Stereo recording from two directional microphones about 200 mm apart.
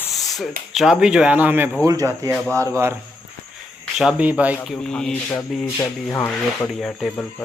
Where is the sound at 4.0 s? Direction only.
5° right (ahead or behind).